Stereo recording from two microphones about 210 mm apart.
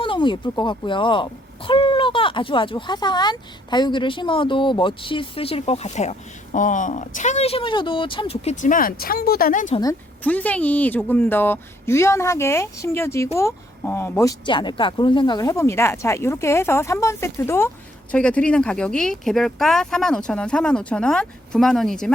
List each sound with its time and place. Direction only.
0.0 s speech: 25° left (ahead or behind); by 9.7 s 40° left (ahead or behind)
10.2 s a woman's voice: 5° left (ahead or behind)